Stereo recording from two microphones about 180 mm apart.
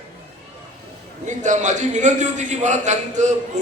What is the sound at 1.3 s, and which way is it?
A man's voice, 40° right (ahead or behind).